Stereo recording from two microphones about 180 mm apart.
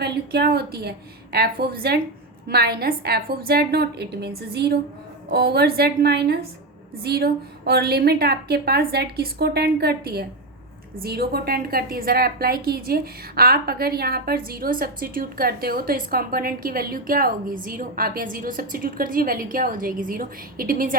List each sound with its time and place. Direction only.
0.0 s a woman's voice: 65° right (ahead or behind)